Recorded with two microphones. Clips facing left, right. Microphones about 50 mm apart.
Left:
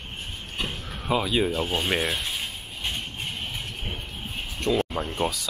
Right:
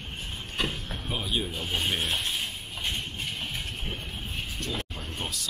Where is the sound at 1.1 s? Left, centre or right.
Left.